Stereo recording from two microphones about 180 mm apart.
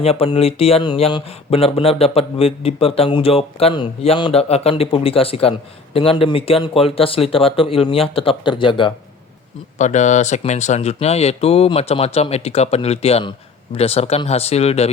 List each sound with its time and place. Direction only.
0.0 s speech: 35° left (ahead or behind)
9.7 s speech: 40° left (ahead or behind)